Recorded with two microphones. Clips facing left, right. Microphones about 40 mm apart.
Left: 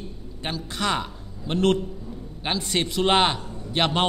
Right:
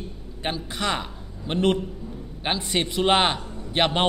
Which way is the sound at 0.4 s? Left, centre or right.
Centre.